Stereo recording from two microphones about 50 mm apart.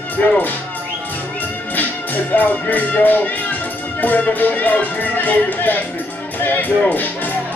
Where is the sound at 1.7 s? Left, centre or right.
Left.